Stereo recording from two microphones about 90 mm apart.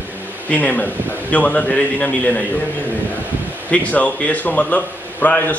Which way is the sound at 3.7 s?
15° left (ahead or behind).